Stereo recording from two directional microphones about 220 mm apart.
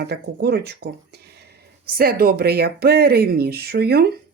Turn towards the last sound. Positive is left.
turn(degrees=-45)  # may be behind; listen again after turning